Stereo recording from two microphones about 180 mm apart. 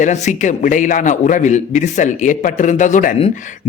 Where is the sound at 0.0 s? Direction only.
40° left (ahead or behind).